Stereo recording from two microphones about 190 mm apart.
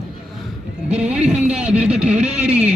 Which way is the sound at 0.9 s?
5° right (ahead or behind).